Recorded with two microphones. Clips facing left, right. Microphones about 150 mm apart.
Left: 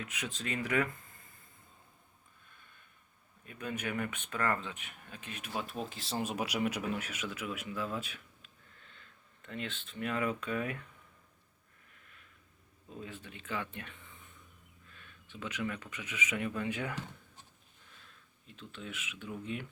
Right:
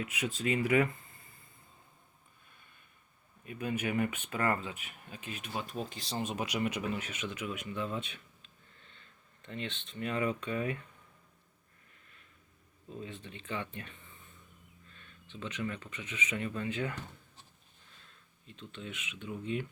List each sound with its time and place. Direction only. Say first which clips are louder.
0.0 s speech: right 6 dB; 5° right (ahead or behind)
3.4 s speech: right 4 dB; 10° right (ahead or behind)
13.0 s speech: right 1 dB; 5° left (ahead or behind)
13.7 s speech: right 1 dB; 65° left (ahead or behind)
15.3 s speech: even; 10° left (ahead or behind)
18.4 s speech: right 1 dB; 5° left (ahead or behind)